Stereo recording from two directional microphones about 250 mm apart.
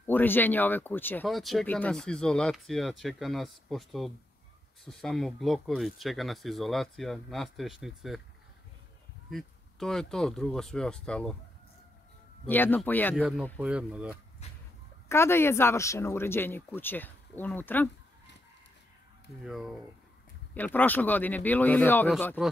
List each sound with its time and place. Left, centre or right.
0.0 s speech: centre
9.3 s speech: centre
12.4 s speech: centre
13.6 s speech: centre
14.4 s a sound: left
15.0 s speech: centre
19.4 s speech: centre